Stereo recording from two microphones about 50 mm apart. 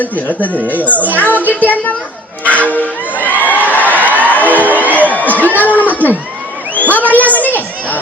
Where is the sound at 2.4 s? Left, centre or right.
Left.